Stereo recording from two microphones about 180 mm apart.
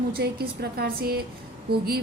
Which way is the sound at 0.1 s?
60° right (ahead or behind).